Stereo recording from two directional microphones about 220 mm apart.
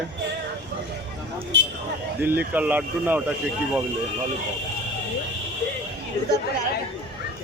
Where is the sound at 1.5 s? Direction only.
55° right (ahead or behind).